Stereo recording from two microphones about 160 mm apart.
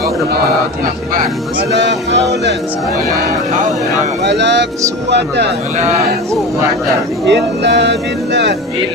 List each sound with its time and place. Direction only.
1.7 s speech: 90° right
4.2 s speech: 90° right
7.2 s speech: 90° right